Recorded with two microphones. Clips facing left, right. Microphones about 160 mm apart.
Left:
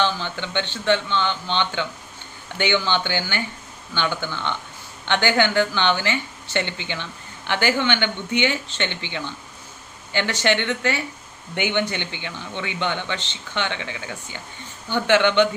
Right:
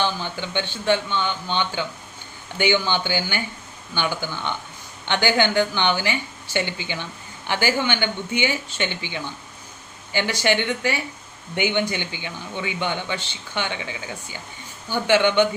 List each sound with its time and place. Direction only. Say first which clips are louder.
0.0 s speech: left 1 dB; 10° right (ahead or behind)